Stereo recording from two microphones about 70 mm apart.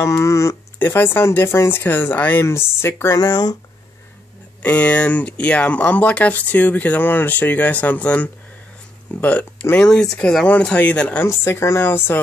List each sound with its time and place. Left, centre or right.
0.0 s speech: left
0.7 s speech: left
2.4 s speech: left
3.2 s speech: left
4.6 s speech: centre
9.8 s speech: centre
11.2 s speech: left